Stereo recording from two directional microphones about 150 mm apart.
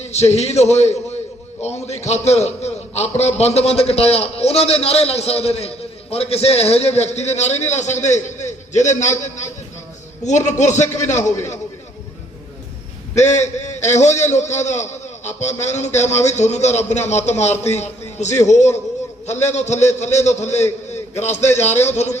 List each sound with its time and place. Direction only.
0.1 s a man's voice: 45° left (ahead or behind)
13.1 s a man's voice: 50° left (ahead or behind)